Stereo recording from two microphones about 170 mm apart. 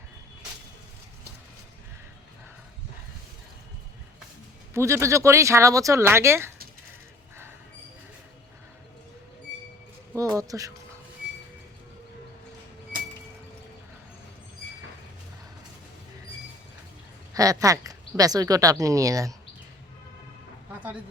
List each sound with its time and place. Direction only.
4.7 s speech: 15° right (ahead or behind)
10.2 s a sound: 20° right (ahead or behind)
17.3 s speech: 20° right (ahead or behind)